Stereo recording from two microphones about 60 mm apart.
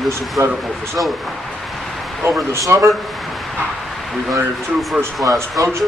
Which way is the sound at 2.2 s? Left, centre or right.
Right.